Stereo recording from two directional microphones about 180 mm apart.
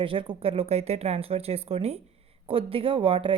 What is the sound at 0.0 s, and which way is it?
Speech, 30° right (ahead or behind).